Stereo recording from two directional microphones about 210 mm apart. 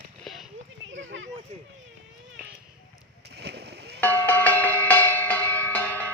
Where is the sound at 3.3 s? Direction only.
50° right (ahead or behind).